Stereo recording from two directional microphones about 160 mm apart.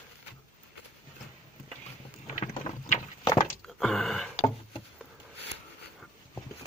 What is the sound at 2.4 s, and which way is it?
Boat, 35° left (ahead or behind).